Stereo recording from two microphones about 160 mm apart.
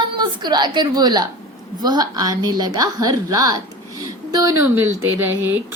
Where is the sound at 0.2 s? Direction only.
25° right (ahead or behind).